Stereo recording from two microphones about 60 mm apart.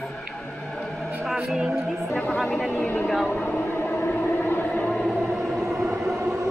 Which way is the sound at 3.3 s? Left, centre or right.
Left.